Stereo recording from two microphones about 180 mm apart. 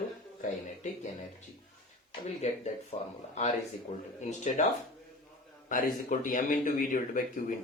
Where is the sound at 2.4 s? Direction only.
40° left (ahead or behind).